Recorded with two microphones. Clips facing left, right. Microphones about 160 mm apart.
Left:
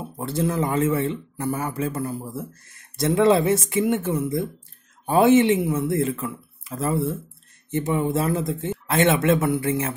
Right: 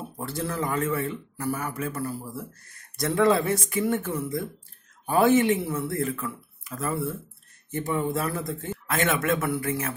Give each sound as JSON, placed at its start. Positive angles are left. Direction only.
{"t": 0.2, "sound": "speech", "side_deg": 20}